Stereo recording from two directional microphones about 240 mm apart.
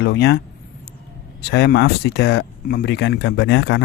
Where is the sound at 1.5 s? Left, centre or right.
Left.